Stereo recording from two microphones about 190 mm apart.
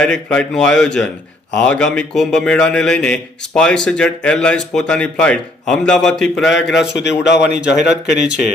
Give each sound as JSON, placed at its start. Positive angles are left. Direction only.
{"t": 0.0, "sound": "a man's voice", "side_deg": 5}
{"t": 6.7, "sound": "a man's voice", "side_deg": 65}